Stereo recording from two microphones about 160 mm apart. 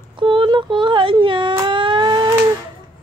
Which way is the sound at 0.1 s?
30° right (ahead or behind).